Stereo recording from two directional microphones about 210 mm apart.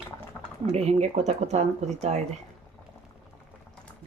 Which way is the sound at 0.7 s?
30° right (ahead or behind).